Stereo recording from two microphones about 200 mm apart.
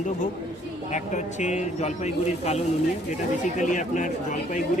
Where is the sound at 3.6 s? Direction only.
40° left (ahead or behind).